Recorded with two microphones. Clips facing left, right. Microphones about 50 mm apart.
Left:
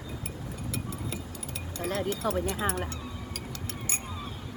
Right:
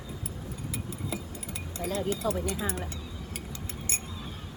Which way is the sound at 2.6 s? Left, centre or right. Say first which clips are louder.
Left 3 dB; left.